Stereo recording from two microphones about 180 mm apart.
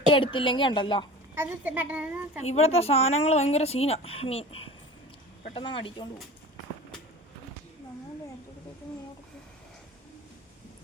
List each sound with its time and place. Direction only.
0.1 s a woman's voice: 30° left (ahead or behind)
1.4 s a woman's voice: 10° right (ahead or behind)
2.4 s a woman's voice: 35° left (ahead or behind)